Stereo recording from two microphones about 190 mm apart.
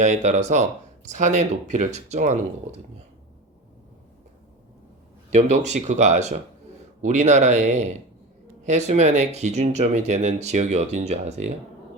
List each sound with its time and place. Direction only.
0.0 s speech: 40° right (ahead or behind)
5.3 s speech: 35° right (ahead or behind)